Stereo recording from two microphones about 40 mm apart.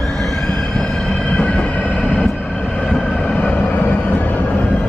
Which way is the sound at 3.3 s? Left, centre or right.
Left.